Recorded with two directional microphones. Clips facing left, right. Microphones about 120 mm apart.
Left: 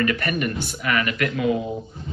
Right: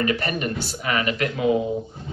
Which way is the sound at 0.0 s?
30° right (ahead or behind).